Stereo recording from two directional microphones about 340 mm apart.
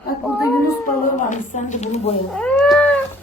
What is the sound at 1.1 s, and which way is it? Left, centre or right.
Speech, left.